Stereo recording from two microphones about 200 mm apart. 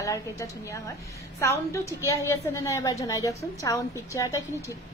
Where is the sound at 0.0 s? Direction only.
15° left (ahead or behind).